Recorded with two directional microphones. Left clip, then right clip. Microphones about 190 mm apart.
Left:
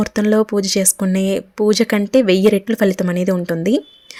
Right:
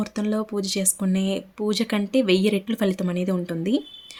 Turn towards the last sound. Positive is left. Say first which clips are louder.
# left 8 dB
turn(degrees=35)  # may be behind; listen again after turning